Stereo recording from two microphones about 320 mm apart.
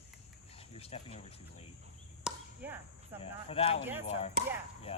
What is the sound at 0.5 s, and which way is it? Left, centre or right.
Speech, centre.